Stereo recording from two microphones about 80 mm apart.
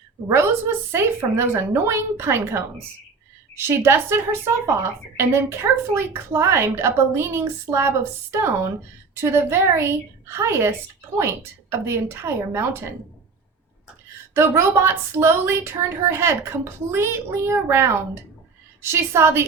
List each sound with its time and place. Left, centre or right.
0.3 s a woman's voice: right
14.3 s a woman's voice: right